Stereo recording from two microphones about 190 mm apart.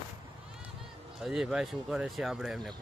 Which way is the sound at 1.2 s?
5° right (ahead or behind).